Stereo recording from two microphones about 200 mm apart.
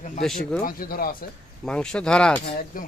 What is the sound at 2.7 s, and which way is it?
Speech, 45° left (ahead or behind).